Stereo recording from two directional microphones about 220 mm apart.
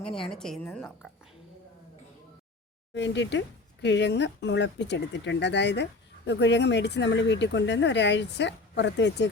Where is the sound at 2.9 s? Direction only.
55° left (ahead or behind).